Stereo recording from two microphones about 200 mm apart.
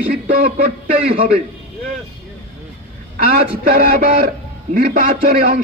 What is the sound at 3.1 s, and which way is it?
A man's voice, 45° right (ahead or behind).